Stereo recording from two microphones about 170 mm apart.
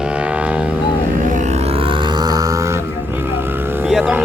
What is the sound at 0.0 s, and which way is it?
Vehicle, 5° right (ahead or behind).